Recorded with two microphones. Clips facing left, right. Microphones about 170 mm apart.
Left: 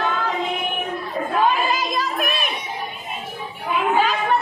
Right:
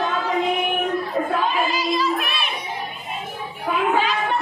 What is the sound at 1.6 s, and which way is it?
Child singing, 45° left (ahead or behind).